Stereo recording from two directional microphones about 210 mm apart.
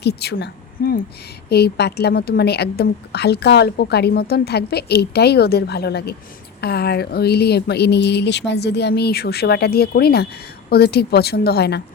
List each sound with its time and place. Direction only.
0.0 s a woman's voice: 50° left (ahead or behind)